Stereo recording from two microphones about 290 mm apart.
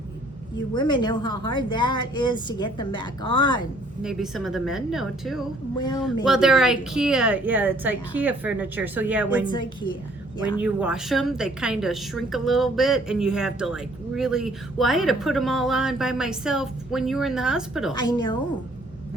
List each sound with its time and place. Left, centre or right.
0.7 s speech: centre
4.0 s a woman's voice: centre
9.5 s a woman's voice: centre
10.6 s a woman's voice: centre
17.9 s speech: centre